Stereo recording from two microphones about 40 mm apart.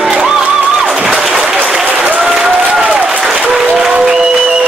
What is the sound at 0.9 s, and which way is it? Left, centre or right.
Applause, centre.